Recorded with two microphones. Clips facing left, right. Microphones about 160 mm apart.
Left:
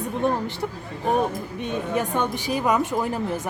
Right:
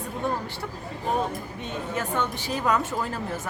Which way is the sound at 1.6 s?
15° left (ahead or behind).